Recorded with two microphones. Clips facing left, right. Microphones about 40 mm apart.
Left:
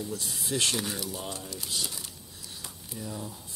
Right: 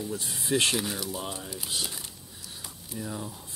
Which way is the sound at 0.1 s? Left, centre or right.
Right.